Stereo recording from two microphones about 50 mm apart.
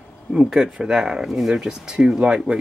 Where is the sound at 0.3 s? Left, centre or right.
Centre.